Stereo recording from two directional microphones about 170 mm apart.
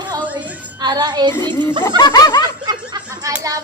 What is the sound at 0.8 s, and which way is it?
Child singing, 25° right (ahead or behind).